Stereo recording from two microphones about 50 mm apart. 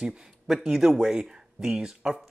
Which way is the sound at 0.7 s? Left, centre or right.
Centre.